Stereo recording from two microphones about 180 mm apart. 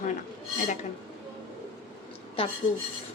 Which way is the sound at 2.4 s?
30° left (ahead or behind).